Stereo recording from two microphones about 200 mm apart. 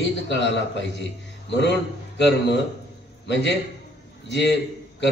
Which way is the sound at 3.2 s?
60° left (ahead or behind).